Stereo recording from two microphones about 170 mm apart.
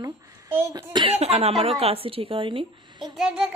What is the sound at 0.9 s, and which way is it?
A woman's voice, 35° right (ahead or behind).